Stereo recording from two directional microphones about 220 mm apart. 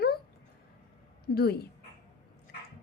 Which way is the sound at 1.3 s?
45° left (ahead or behind).